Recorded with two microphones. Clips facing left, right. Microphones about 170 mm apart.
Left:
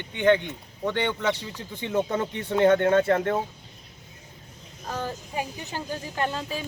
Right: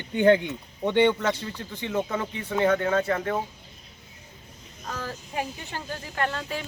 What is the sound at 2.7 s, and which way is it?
Speech, 50° left (ahead or behind).